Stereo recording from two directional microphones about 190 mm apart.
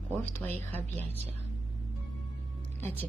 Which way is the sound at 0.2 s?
10° left (ahead or behind).